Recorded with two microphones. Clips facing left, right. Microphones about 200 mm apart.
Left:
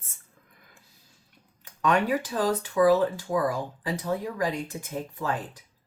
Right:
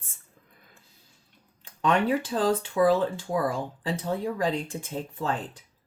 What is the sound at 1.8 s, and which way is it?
Speech, 25° right (ahead or behind).